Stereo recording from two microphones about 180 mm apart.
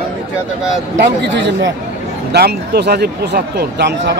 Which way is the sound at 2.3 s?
65° right (ahead or behind).